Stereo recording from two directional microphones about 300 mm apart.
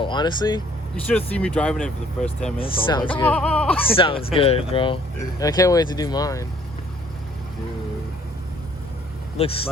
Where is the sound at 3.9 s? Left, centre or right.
Centre.